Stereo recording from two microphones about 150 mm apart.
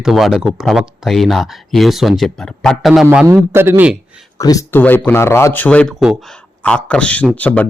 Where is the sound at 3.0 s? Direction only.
15° right (ahead or behind).